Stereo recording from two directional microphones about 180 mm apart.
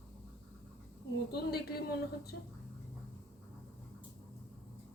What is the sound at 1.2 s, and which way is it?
A woman's voice, 60° left (ahead or behind).